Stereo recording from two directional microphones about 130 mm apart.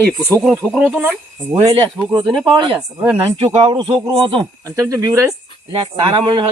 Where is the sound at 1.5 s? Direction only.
30° right (ahead or behind).